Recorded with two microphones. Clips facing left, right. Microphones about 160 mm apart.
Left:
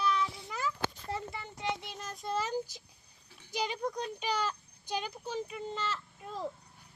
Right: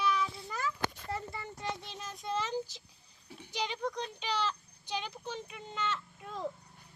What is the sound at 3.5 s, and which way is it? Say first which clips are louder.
Speech: left 2 dB; 10° left (ahead or behind).